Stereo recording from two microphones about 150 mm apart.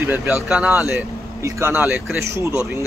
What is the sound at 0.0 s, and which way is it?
Speech, 15° right (ahead or behind).